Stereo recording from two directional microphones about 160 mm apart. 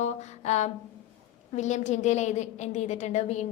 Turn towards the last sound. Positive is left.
turn(degrees=45)  # may be behind; listen again after turning